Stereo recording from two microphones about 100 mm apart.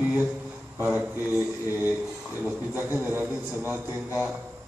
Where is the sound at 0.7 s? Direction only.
20° right (ahead or behind).